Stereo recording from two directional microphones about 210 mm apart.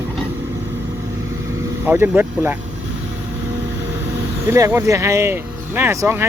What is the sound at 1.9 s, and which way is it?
Speech, 10° right (ahead or behind).